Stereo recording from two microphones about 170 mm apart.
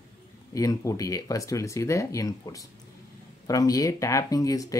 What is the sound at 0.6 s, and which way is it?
Speech, 20° left (ahead or behind).